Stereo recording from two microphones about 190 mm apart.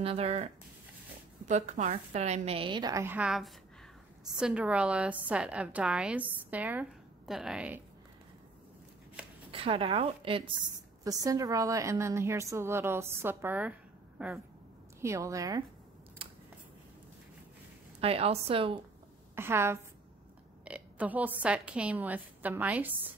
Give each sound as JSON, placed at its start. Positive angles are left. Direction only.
{"t": 0.0, "sound": "a woman's voice", "side_deg": -30}
{"t": 1.5, "sound": "a woman's voice", "side_deg": -40}
{"t": 9.5, "sound": "a woman's voice", "side_deg": -30}
{"t": 16.2, "sound": "scissors", "side_deg": -30}
{"t": 18.0, "sound": "a woman's voice", "side_deg": -30}
{"t": 19.3, "sound": "a woman's voice", "side_deg": -15}
{"t": 20.6, "sound": "burping", "side_deg": -5}
{"t": 21.4, "sound": "a woman's voice", "side_deg": -5}